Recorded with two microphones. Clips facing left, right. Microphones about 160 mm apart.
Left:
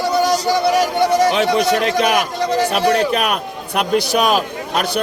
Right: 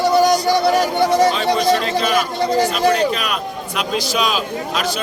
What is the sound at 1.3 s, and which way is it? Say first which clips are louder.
A man's voice: left 1 dB; 70° left (ahead or behind).